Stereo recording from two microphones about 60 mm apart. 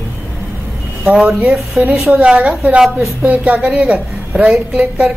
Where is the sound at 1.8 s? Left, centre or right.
Right.